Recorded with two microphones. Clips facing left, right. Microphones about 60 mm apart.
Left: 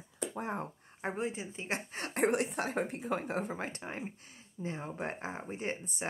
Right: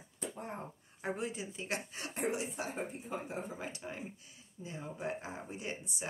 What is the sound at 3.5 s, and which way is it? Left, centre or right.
Speech, left.